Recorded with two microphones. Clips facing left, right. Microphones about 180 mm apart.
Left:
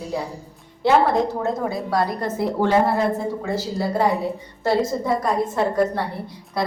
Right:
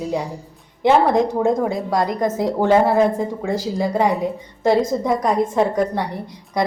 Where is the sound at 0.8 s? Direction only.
20° right (ahead or behind).